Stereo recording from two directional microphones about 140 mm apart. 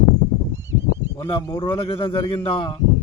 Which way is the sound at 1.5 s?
35° left (ahead or behind).